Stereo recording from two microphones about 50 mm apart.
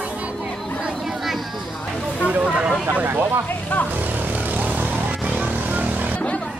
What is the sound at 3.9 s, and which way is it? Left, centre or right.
Vehicle, right.